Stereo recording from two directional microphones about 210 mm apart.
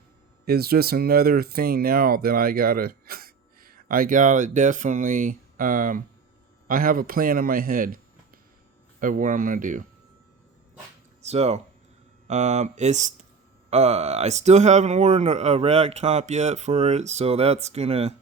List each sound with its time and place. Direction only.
0.4 s speech: 50° right (ahead or behind)
11.2 s speech: 30° right (ahead or behind)